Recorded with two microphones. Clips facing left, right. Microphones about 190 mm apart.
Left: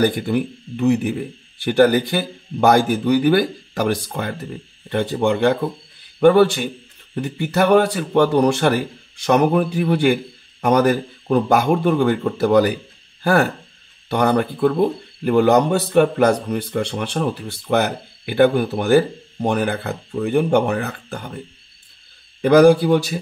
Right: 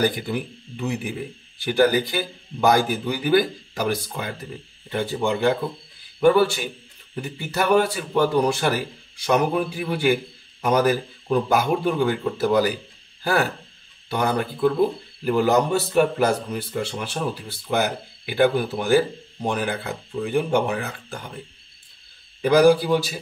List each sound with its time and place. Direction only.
0.0 s speech: 60° left (ahead or behind)
5.2 s a man's voice: 65° left (ahead or behind)
22.4 s speech: 60° left (ahead or behind)